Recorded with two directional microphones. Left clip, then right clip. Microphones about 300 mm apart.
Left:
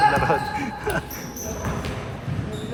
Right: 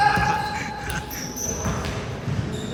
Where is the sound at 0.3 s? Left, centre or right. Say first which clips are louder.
Left 1 dB; centre.